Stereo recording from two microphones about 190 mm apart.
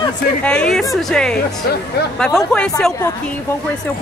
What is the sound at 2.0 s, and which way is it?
Speech, 55° left (ahead or behind).